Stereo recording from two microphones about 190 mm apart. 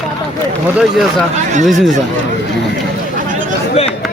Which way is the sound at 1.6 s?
Centre (ahead or behind).